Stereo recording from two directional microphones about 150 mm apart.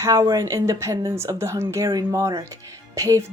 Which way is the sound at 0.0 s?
20° right (ahead or behind).